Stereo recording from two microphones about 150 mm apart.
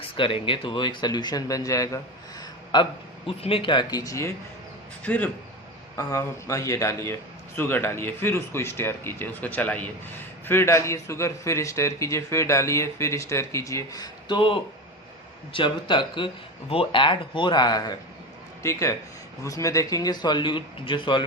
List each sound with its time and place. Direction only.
0.2 s a man's voice: 35° left (ahead or behind)
5.0 s a man's voice: 10° left (ahead or behind); by 21.2 s 35° left (ahead or behind)